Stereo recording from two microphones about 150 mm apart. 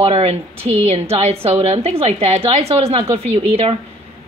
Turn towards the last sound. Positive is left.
turn(degrees=-40)  # may be behind; listen again after turning